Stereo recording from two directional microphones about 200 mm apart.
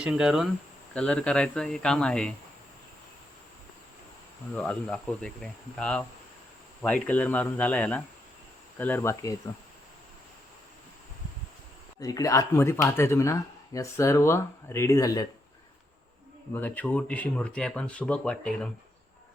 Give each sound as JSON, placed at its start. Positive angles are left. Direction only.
{"t": 0.0, "sound": "speech", "side_deg": -5}
{"t": 4.5, "sound": "speech", "side_deg": 5}
{"t": 11.9, "sound": "speech", "side_deg": 15}
{"t": 16.6, "sound": "speech", "side_deg": 10}